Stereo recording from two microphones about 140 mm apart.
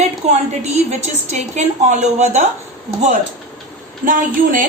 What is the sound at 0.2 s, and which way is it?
A woman's voice, 50° right (ahead or behind).